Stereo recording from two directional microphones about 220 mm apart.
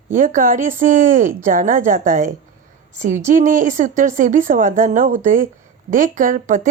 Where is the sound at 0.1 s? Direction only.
35° right (ahead or behind).